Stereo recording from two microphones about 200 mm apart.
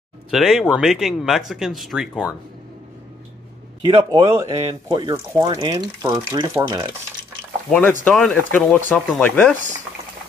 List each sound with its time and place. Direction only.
0.3 s speech: centre (ahead or behind)
3.8 s speech: 20° right (ahead or behind)
8.0 s speech: 5° left (ahead or behind)